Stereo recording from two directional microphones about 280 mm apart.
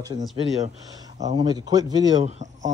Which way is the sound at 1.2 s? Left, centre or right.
Centre.